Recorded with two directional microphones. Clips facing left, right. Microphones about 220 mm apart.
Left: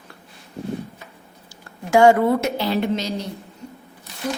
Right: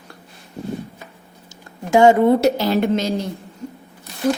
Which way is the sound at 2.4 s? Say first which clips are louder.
Right 5 dB; 45° right (ahead or behind).